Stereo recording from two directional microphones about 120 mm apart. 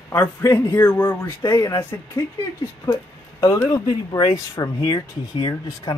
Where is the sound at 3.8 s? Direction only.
40° left (ahead or behind).